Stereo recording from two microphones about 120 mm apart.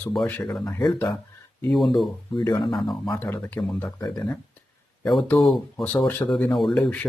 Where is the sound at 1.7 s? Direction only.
Centre (ahead or behind).